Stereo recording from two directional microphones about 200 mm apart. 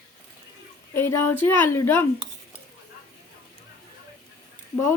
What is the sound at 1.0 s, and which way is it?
Speech, 10° left (ahead or behind).